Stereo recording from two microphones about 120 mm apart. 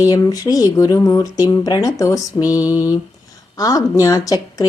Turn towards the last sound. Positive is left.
turn(degrees=30)  # may be behind; listen again after turning